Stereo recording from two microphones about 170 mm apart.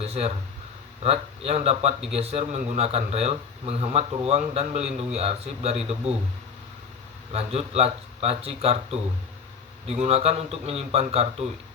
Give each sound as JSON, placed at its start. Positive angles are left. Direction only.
{"t": 0.0, "sound": "a man's voice", "side_deg": -35}
{"t": 7.3, "sound": "a man's voice", "side_deg": -35}